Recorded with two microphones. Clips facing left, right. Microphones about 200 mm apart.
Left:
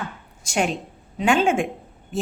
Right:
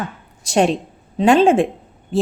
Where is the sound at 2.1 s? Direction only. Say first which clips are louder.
Right 8 dB; 30° right (ahead or behind).